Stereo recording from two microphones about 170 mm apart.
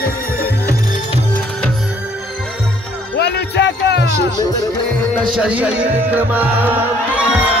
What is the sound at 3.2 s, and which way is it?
Music, 80° left.